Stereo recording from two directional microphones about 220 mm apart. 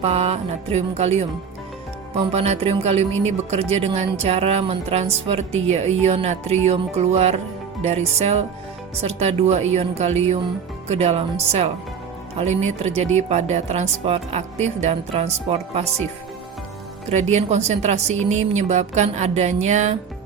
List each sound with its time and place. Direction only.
0.0 s a woman's voice: 30° right (ahead or behind)
2.3 s a woman's voice: 30° right (ahead or behind)
17.1 s a woman's voice: 30° right (ahead or behind)